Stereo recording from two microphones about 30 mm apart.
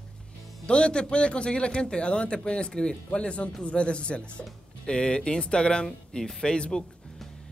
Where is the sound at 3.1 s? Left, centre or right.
Left.